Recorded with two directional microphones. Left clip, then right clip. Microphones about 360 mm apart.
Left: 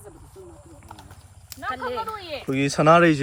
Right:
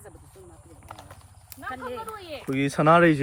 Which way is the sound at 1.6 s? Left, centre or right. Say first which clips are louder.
Left 6 dB; centre.